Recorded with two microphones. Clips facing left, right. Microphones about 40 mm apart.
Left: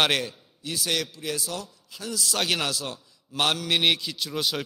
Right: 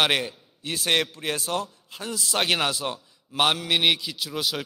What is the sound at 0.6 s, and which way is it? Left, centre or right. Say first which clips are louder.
A man's voice: right 4 dB; right.